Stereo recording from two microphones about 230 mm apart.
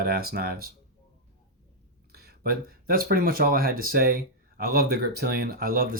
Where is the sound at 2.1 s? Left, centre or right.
Right.